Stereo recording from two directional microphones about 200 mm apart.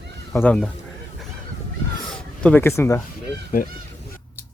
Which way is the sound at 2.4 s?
10° left (ahead or behind).